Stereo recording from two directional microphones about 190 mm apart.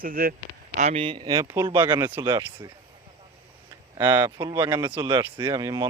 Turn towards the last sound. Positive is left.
turn(degrees=-20)  # may be behind; listen again after turning